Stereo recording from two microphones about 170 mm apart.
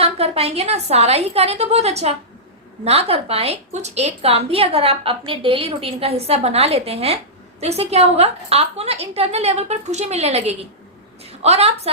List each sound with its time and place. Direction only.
0.0 s a woman's voice: 35° right (ahead or behind)